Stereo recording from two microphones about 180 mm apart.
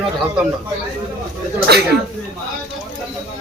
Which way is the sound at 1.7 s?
65° right (ahead or behind).